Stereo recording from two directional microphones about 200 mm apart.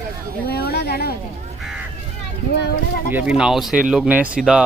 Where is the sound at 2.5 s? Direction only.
55° left (ahead or behind).